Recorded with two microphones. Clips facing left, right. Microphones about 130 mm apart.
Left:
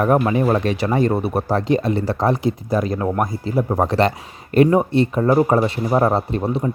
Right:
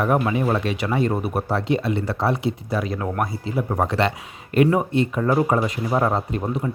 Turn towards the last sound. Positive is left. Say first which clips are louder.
# left 4 dB
turn(degrees=35)  # may be behind; listen again after turning